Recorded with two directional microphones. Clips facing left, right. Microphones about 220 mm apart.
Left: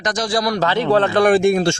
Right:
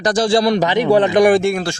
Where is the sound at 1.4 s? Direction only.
25° left (ahead or behind).